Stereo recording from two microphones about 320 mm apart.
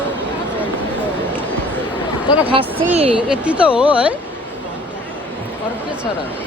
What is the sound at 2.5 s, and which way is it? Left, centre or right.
Speech, centre.